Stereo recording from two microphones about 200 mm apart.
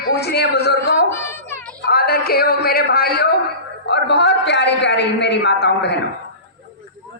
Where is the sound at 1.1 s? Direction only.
10° left (ahead or behind).